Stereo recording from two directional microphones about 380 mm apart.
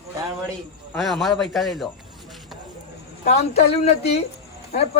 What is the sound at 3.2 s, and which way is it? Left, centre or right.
Speech, centre.